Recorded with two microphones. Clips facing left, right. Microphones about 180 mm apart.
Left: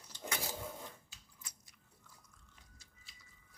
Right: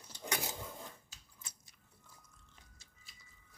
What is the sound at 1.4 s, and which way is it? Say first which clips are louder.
Biting: right 1 dB; 25° right (ahead or behind).